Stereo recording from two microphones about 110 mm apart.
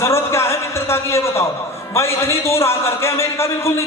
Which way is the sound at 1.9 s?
25° left (ahead or behind).